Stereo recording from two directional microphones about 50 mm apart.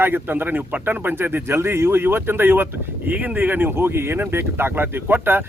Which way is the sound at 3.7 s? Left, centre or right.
Right.